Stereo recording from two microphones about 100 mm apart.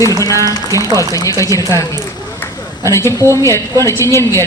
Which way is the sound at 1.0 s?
35° left (ahead or behind).